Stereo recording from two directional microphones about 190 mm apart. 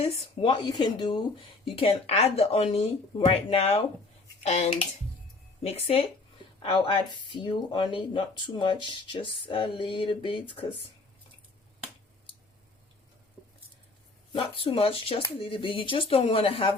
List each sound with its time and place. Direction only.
0.0 s speech: 30° left (ahead or behind)
14.3 s speech: 30° left (ahead or behind)